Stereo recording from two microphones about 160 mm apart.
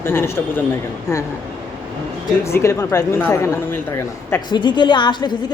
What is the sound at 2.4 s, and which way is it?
Speech, 15° left (ahead or behind).